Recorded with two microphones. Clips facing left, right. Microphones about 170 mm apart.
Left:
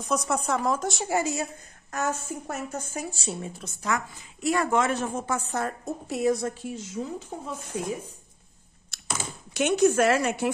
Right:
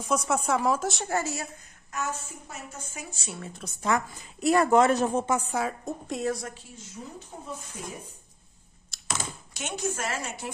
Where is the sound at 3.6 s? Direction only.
35° right (ahead or behind).